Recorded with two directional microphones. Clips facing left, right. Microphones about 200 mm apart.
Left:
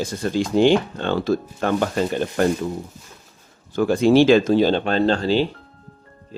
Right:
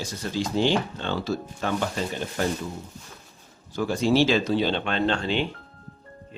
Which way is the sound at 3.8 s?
55° left (ahead or behind).